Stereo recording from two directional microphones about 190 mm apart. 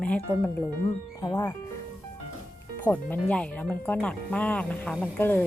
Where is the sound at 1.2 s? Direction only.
15° left (ahead or behind).